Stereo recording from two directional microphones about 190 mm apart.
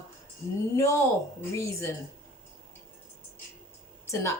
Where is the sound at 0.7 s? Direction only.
15° left (ahead or behind).